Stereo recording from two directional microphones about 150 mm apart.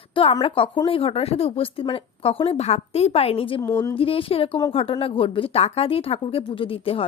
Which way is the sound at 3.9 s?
40° left (ahead or behind).